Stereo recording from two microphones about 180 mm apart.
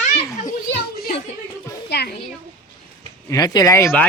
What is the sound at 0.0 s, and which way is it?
Children playing, 40° left (ahead or behind).